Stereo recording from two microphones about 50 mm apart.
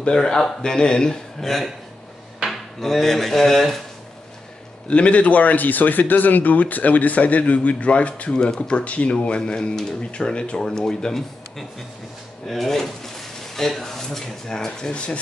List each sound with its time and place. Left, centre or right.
0.1 s speech: centre
2.8 s speech: centre
4.8 s speech: left